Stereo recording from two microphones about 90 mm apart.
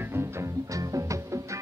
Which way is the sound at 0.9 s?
35° right (ahead or behind).